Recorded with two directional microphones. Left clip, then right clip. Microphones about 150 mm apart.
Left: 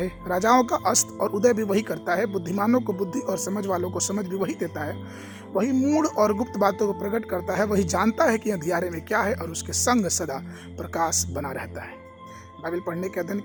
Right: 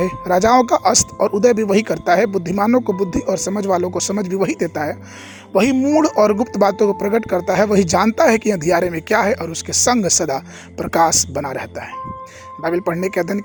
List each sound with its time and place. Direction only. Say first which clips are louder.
0.0 s speech: right 9 dB; 45° right (ahead or behind)
5.7 s speech: right 7 dB; 25° right (ahead or behind)
6.0 s speech: right 10 dB; 40° right (ahead or behind)
12.6 s speech: right 10 dB; 55° right (ahead or behind)